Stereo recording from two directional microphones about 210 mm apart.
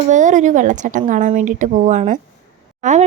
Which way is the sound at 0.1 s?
35° right (ahead or behind).